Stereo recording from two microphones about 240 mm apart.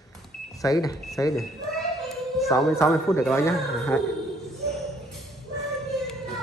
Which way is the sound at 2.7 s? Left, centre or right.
Centre.